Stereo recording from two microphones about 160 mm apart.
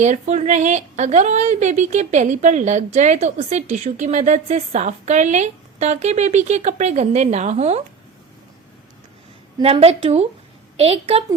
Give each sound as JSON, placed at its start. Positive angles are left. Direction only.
{"t": 0.0, "sound": "speech", "side_deg": -45}
{"t": 9.6, "sound": "a woman's voice", "side_deg": -35}